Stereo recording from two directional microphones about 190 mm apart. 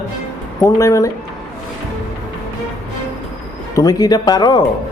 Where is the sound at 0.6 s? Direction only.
15° left (ahead or behind).